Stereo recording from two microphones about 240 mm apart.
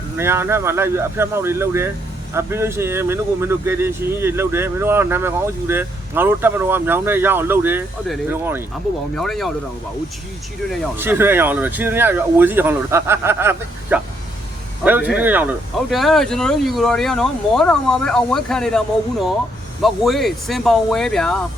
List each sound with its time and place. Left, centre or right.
0.2 s speech: centre
9.1 s speech: centre
10.7 s speech: centre
19.8 s speech: centre